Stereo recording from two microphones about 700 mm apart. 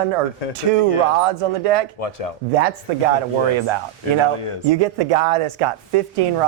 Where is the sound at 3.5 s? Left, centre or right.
Right.